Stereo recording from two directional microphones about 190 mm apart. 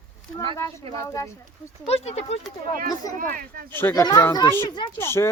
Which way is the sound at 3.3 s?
50° right (ahead or behind).